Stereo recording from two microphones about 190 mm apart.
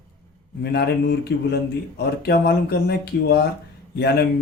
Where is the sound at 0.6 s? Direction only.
55° left (ahead or behind).